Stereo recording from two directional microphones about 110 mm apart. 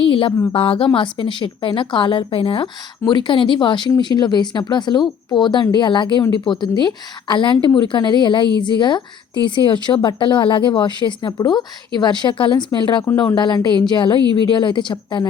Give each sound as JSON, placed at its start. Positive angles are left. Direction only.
{"t": 0.0, "sound": "speech", "side_deg": 55}